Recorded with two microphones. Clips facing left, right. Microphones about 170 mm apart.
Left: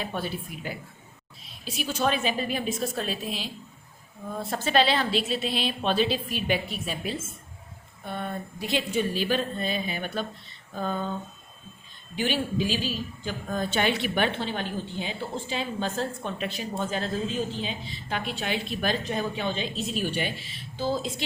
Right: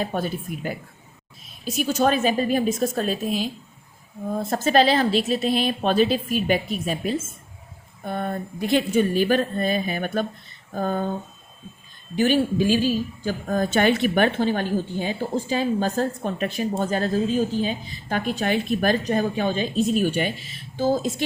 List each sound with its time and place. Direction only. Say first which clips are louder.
0.0 s a woman's voice: right 6 dB; 45° right (ahead or behind)
12.1 s a woman's voice: right 7 dB; 45° right (ahead or behind)